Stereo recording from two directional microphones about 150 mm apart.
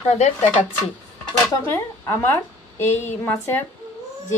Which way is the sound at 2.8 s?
15° left (ahead or behind).